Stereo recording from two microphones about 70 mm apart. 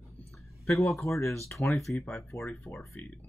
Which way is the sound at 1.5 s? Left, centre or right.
Left.